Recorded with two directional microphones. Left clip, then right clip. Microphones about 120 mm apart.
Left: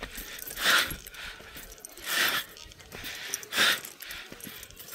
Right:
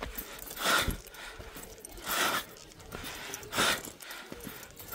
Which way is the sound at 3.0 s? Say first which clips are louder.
Left 4 dB; 50° right (ahead or behind).